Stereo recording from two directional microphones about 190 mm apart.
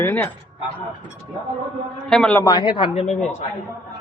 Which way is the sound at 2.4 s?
20° left (ahead or behind).